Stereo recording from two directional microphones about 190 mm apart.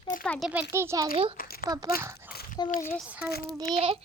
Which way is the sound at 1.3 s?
50° left (ahead or behind).